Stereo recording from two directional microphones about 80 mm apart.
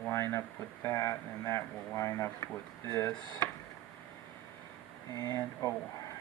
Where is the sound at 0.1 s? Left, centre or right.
Left.